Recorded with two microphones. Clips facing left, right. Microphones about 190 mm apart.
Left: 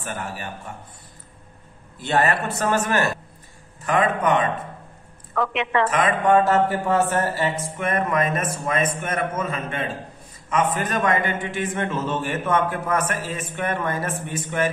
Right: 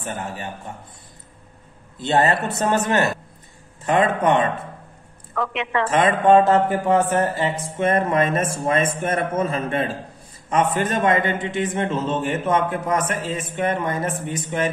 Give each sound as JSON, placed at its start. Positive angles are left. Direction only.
{"t": 0.0, "sound": "a man's voice", "side_deg": -20}
{"t": 2.0, "sound": "a man's voice", "side_deg": -20}
{"t": 5.3, "sound": "speech", "side_deg": 65}
{"t": 5.9, "sound": "a man's voice", "side_deg": -30}